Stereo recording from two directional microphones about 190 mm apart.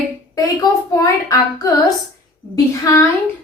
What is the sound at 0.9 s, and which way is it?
Hands, 20° left (ahead or behind).